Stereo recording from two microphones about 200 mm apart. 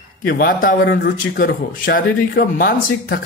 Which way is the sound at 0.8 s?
60° left (ahead or behind).